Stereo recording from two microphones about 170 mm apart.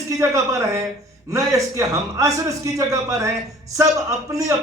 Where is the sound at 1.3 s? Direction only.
20° right (ahead or behind).